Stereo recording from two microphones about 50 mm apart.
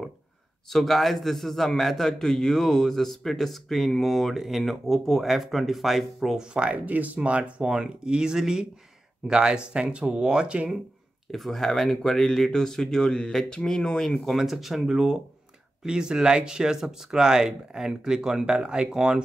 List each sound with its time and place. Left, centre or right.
0.7 s a man's voice: centre
6.3 s speech: right
11.3 s speech: centre